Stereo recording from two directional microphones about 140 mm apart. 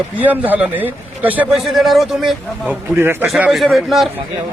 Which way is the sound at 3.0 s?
15° right (ahead or behind).